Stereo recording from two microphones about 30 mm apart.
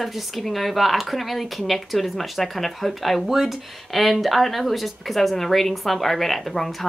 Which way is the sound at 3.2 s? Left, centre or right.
Centre.